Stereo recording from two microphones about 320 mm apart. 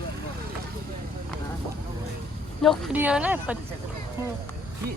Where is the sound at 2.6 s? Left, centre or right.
Centre.